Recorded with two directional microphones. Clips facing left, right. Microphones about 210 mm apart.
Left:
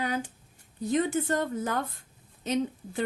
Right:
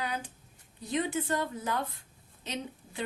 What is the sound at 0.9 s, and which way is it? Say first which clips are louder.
A woman's voice: left 4 dB; 45° left (ahead or behind).